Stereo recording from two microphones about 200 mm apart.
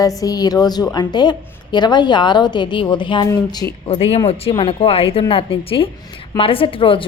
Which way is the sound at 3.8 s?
30° left (ahead or behind).